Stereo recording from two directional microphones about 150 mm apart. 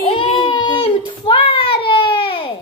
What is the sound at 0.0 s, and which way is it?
Child singing, 40° left (ahead or behind).